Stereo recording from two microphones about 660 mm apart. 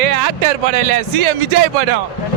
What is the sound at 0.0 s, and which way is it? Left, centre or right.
Speech, right.